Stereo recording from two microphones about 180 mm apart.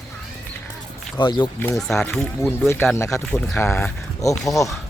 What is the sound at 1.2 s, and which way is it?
Speech, 25° left (ahead or behind).